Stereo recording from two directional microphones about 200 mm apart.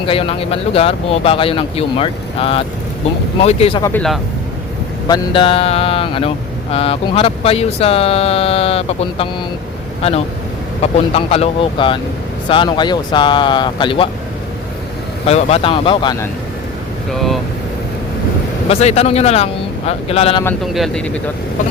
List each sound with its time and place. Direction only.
0.0 s mantra: 25° left (ahead or behind)
5.0 s mantra: 20° left (ahead or behind)
11.1 s mantra: 30° left (ahead or behind)
15.3 s mantra: 30° left (ahead or behind)
17.1 s speech: centre (ahead or behind)
18.7 s speech: 30° left (ahead or behind)
19.9 s mantra: 30° left (ahead or behind)
20.7 s speech: centre (ahead or behind)